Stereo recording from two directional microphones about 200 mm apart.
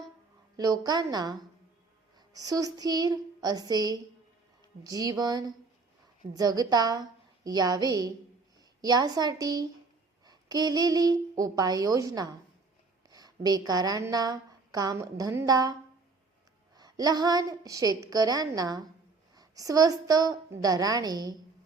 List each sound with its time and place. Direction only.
0.5 s a woman's voice: 20° right (ahead or behind)
16.7 s a woman's voice: 20° right (ahead or behind)